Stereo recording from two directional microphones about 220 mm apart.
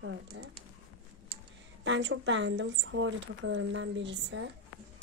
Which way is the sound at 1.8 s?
55° right (ahead or behind).